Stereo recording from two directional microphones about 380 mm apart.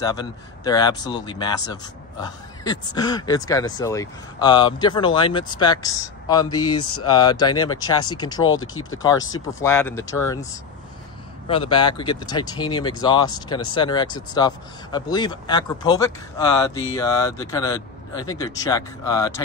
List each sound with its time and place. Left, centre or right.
0.0 s speech: centre
8.5 s speech: left
9.5 s speech: centre